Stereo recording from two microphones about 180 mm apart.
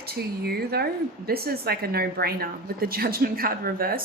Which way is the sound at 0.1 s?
60° right (ahead or behind).